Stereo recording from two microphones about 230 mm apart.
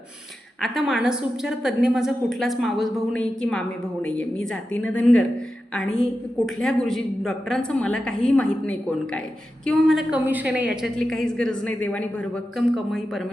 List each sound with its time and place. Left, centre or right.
0.6 s a woman's voice: centre